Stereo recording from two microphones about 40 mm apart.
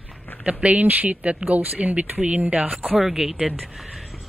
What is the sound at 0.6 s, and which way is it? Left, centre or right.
Speech, right.